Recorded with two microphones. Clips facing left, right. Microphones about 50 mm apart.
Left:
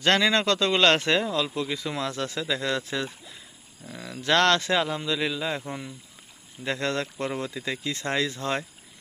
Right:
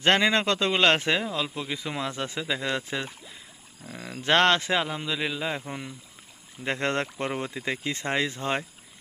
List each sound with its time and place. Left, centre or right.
0.0 s a man's voice: right
6.7 s speech: right